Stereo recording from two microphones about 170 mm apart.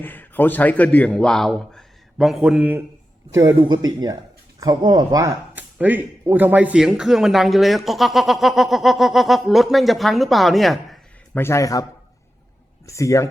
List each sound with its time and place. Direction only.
0.0 s speech: 10° left (ahead or behind); by 2.8 s 5° right (ahead or behind)
3.3 s speech: 25° right (ahead or behind); by 11.0 s centre (ahead or behind)
11.3 s speech: 15° left (ahead or behind)